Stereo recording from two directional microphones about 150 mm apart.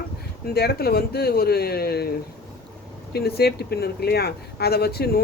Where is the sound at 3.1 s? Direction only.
90° left.